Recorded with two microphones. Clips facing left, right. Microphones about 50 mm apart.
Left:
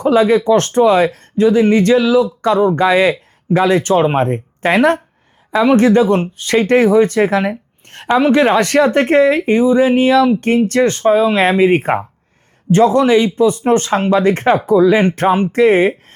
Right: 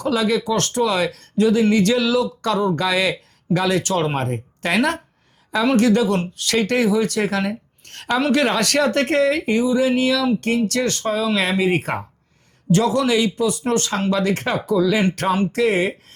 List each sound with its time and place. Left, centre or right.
0.0 s speech: left
7.1 s speech: left